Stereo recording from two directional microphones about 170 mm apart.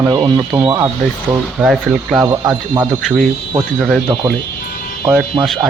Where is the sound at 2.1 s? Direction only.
20° right (ahead or behind).